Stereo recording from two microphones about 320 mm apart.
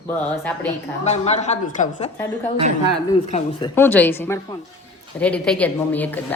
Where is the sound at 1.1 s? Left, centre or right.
Left.